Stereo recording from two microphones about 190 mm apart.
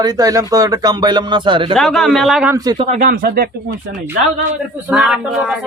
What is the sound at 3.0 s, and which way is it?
Speech, 50° right (ahead or behind).